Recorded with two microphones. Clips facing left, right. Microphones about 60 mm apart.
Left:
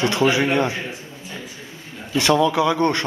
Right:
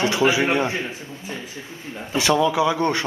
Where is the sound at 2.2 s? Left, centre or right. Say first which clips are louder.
Left 1 dB; centre.